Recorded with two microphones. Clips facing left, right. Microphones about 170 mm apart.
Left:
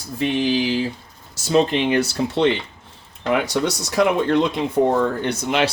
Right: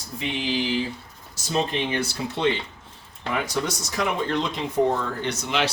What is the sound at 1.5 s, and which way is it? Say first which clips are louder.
Speech: left 8 dB; 85° left.